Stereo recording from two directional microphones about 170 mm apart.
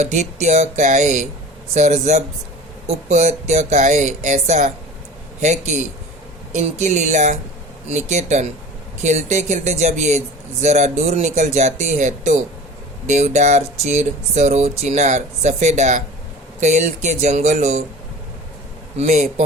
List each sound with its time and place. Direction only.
0.0 s speech: 40° right (ahead or behind)
18.9 s speech: 40° right (ahead or behind)